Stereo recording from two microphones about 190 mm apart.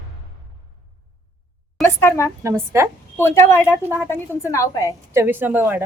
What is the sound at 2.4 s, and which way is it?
Speech, 15° right (ahead or behind).